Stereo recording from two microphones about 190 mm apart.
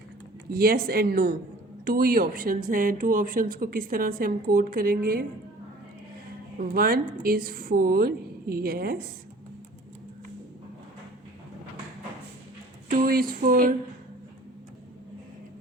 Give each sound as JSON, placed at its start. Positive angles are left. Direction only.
{"t": 0.5, "sound": "a woman's voice", "side_deg": -50}
{"t": 6.6, "sound": "a woman's voice", "side_deg": -50}
{"t": 12.9, "sound": "a woman's voice", "side_deg": -50}